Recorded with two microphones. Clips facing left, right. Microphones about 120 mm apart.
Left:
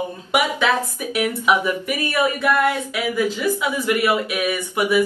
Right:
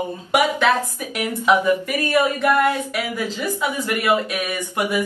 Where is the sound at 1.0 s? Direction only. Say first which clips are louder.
Left 3 dB; 15° left (ahead or behind).